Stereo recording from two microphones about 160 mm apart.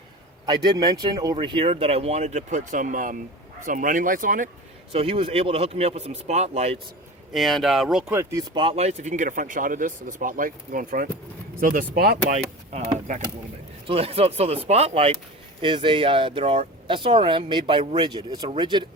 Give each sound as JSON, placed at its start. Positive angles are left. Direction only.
{"t": 0.4, "sound": "speech", "side_deg": -25}
{"t": 4.9, "sound": "speech", "side_deg": -35}
{"t": 7.3, "sound": "speech", "side_deg": 0}
{"t": 8.1, "sound": "speech", "side_deg": -20}
{"t": 8.5, "sound": "speech", "side_deg": -40}
{"t": 13.8, "sound": "speech", "side_deg": -35}